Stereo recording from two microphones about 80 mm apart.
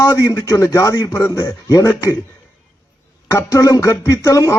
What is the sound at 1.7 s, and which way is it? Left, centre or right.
Speech, left.